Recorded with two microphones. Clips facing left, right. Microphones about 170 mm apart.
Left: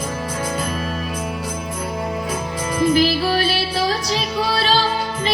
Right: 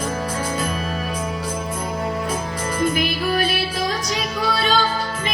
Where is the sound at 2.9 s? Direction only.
30° left (ahead or behind).